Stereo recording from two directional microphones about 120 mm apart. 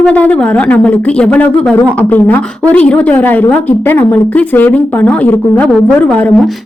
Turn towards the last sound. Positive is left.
turn(degrees=5)  # may be behind; listen again after turning